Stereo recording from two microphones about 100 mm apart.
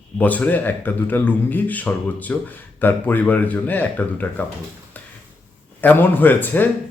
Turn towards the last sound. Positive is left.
turn(degrees=20)  # may be behind; listen again after turning